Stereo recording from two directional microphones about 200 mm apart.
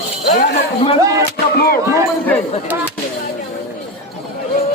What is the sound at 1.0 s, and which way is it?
Speech, 15° right (ahead or behind).